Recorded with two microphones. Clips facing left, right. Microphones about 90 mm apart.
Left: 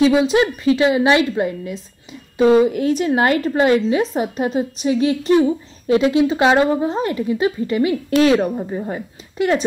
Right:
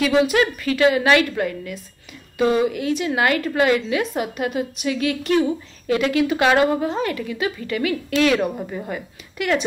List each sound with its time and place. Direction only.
0.2 s a woman's voice: 25° left (ahead or behind)
2.7 s a woman's voice: 40° left (ahead or behind)